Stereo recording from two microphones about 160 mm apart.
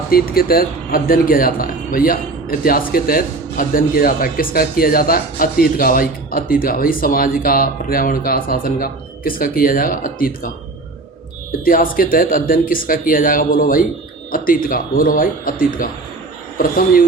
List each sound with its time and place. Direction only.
0.1 s speech: 70° left (ahead or behind)
11.6 s speech: 65° left (ahead or behind)